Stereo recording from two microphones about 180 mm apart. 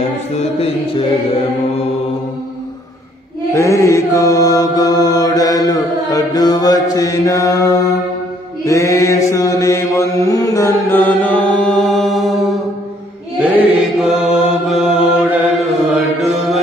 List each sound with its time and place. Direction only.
0.3 s music: 35° left (ahead or behind)
3.5 s mantra: 15° left (ahead or behind)
13.5 s mantra: 5° right (ahead or behind)
16.2 s music: centre (ahead or behind)